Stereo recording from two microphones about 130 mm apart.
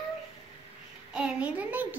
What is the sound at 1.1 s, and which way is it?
Speech, 10° right (ahead or behind).